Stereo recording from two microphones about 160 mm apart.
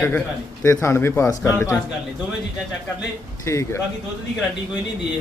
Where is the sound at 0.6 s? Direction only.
20° left (ahead or behind).